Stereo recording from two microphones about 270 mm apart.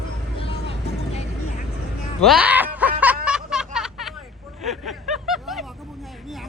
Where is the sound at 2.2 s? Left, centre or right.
Centre.